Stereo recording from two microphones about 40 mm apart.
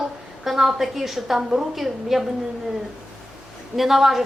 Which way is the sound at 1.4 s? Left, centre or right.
Centre.